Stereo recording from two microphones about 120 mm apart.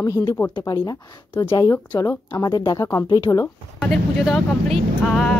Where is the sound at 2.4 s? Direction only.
35° left (ahead or behind).